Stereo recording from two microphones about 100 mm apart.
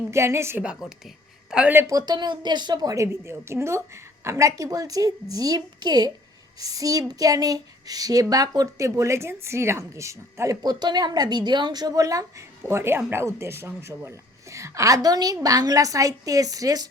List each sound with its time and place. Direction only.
0.1 s speech: 25° right (ahead or behind)
0.6 s a woman's voice: 5° right (ahead or behind)
1.9 s a woman's voice: 40° right (ahead or behind)
12.6 s a woman's voice: 25° right (ahead or behind); by 16.9 s 40° right (ahead or behind)